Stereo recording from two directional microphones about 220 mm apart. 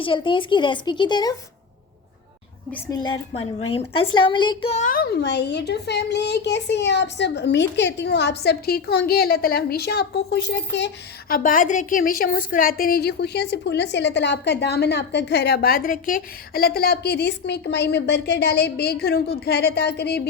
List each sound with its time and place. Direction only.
0.0 s speech: 25° left (ahead or behind)
2.7 s a woman's voice: 15° left (ahead or behind); by 20.2 s 50° left (ahead or behind)